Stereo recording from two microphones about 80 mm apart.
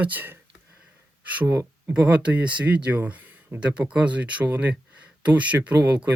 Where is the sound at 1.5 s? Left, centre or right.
Right.